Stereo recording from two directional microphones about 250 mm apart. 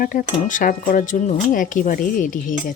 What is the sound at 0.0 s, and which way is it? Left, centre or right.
Speech, left.